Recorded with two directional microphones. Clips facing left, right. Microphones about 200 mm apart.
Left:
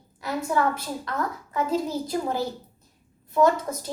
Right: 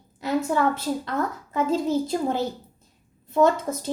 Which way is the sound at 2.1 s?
25° right (ahead or behind).